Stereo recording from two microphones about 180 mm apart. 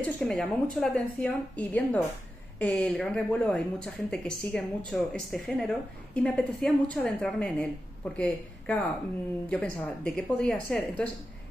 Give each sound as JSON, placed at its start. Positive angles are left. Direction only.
{"t": 0.0, "sound": "speech", "side_deg": 5}